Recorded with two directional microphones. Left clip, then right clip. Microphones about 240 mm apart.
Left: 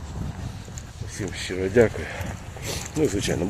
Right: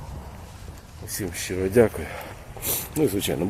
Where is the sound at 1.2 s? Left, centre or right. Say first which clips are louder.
Even; centre.